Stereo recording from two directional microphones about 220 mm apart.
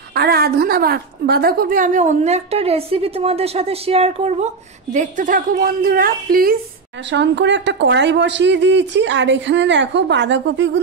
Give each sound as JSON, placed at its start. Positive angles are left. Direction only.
{"t": 0.1, "sound": "a woman's voice", "side_deg": -45}
{"t": 7.1, "sound": "a woman's voice", "side_deg": -55}